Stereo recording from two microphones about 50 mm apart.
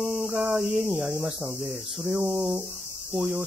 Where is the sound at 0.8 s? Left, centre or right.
Right.